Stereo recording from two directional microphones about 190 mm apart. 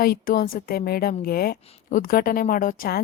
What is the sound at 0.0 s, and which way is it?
Speech, 50° left (ahead or behind).